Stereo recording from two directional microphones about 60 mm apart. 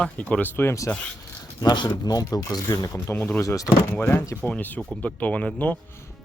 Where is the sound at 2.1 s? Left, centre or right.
Left.